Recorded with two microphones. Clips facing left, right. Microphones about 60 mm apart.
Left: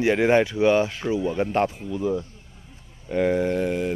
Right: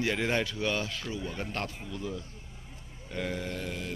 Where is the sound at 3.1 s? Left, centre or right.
Left.